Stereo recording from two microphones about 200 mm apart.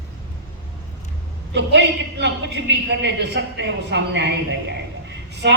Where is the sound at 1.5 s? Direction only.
60° right (ahead or behind).